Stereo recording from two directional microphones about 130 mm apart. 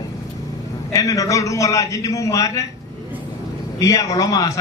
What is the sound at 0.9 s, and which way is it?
A man's voice, 25° left (ahead or behind).